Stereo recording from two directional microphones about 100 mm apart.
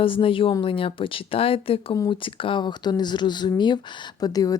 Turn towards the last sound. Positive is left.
turn(degrees=40)  # may be behind; listen again after turning